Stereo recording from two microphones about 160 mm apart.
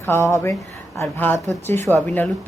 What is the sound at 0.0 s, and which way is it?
A woman's voice, 15° left (ahead or behind).